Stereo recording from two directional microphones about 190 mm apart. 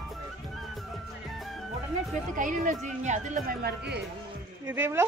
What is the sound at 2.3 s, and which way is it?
Speech, 45° right (ahead or behind).